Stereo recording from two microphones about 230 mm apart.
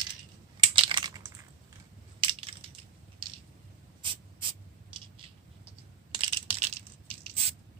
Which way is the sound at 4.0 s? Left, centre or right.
Right.